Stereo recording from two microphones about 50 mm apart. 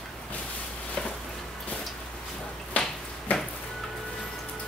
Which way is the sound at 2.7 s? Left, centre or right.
Left.